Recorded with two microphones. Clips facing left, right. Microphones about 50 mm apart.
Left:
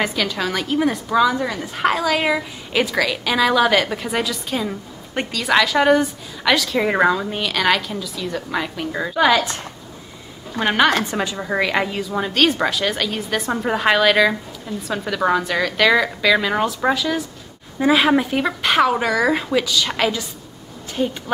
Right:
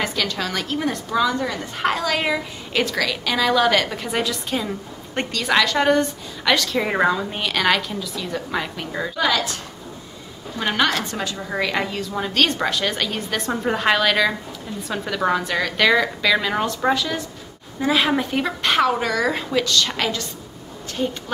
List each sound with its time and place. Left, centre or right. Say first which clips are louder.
0.0 s a woman's voice: left 3 dB; centre
9.1 s a woman's voice: left 6 dB; left
10.6 s a woman's voice: left 4 dB; centre
17.7 s a woman's voice: left 4 dB; centre